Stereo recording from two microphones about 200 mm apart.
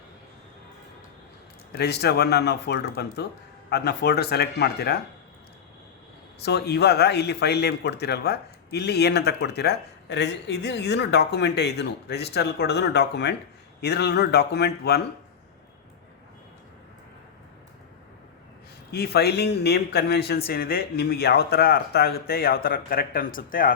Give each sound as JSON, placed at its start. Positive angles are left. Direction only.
{"t": 1.7, "sound": "speech", "side_deg": 55}
{"t": 6.4, "sound": "speech", "side_deg": 55}
{"t": 18.9, "sound": "speech", "side_deg": 55}